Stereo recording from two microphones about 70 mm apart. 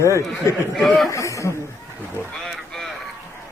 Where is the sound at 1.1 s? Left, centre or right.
Left.